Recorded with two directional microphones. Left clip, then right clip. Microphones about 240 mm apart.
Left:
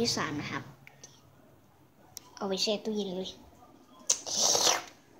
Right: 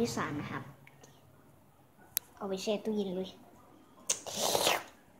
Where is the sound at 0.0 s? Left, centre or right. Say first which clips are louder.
Left 3 dB; centre.